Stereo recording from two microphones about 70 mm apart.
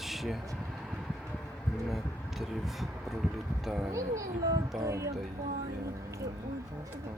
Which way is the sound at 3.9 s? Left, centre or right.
Right.